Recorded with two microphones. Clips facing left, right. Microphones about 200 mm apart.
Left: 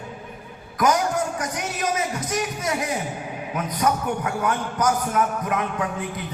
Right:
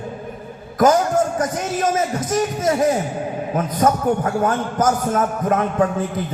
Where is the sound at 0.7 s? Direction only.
50° right (ahead or behind).